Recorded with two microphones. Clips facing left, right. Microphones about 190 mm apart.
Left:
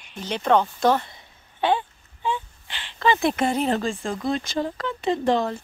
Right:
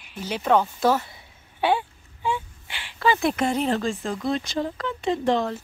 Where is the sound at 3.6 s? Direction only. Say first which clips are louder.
Even; 35° left (ahead or behind).